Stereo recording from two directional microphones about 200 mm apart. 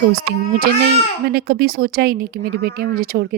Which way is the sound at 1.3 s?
50° right (ahead or behind).